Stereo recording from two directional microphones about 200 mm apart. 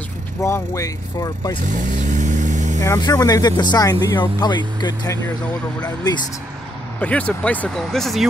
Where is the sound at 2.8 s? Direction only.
15° left (ahead or behind).